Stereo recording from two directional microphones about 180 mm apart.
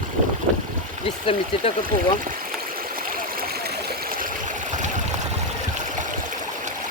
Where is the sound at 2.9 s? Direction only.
55° right (ahead or behind).